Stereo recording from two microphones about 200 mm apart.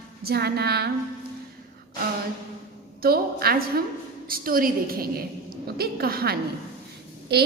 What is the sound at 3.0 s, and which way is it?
A woman's voice, 50° right (ahead or behind).